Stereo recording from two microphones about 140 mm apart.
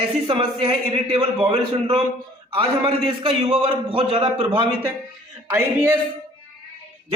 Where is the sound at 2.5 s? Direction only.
40° right (ahead or behind).